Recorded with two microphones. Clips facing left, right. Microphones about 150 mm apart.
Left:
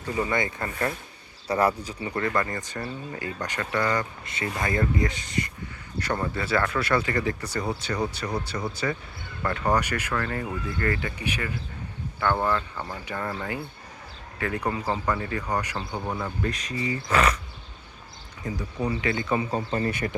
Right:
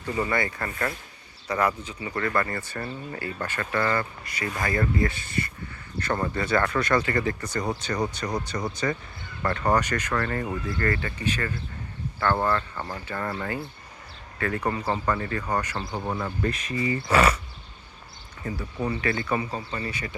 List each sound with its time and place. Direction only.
0.2 s speech: 20° left (ahead or behind)
1.5 s speech: 30° left (ahead or behind); by 15.9 s 10° left (ahead or behind)
15.9 s speech: 10° right (ahead or behind)
18.4 s speech: 15° left (ahead or behind)
19.5 s speech: 45° left (ahead or behind)